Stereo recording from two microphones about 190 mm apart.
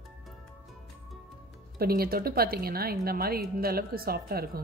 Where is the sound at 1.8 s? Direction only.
50° right (ahead or behind).